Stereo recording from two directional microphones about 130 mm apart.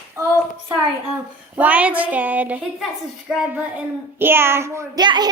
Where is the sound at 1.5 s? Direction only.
10° right (ahead or behind).